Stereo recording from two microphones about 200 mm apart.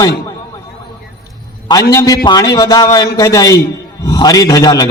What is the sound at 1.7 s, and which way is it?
A man's voice, 15° left (ahead or behind).